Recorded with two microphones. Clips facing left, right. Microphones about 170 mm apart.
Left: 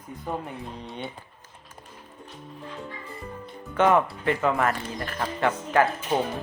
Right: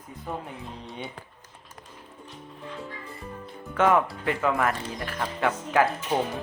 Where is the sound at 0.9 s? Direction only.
Centre (ahead or behind).